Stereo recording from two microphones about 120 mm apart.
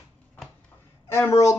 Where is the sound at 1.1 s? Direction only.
25° left (ahead or behind).